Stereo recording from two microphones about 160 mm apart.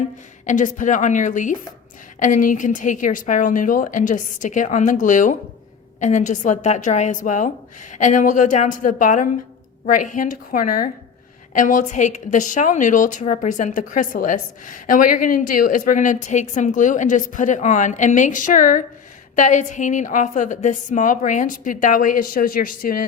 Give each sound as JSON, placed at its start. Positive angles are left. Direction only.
{"t": 0.4, "sound": "a woman's voice", "side_deg": 50}